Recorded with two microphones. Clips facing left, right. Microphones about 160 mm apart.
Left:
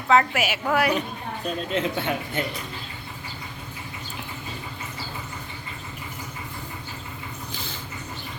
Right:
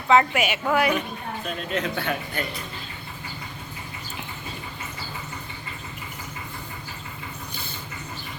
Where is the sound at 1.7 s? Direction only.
25° left (ahead or behind).